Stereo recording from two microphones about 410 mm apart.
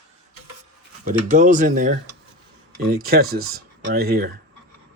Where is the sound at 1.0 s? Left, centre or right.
Centre.